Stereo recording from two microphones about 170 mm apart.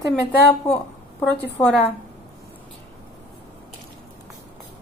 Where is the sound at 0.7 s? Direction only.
10° left (ahead or behind).